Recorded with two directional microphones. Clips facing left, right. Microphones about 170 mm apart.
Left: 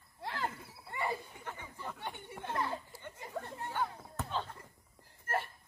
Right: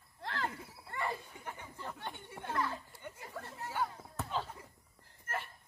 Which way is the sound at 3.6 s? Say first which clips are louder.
Right 2 dB; 5° right (ahead or behind).